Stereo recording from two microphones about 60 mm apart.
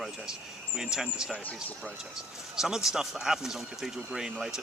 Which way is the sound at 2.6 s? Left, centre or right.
Centre.